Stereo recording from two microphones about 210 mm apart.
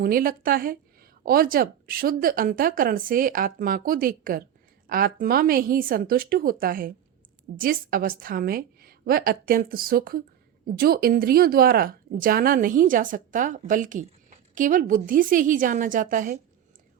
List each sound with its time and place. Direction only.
0.0 s a woman's voice: 45° right (ahead or behind)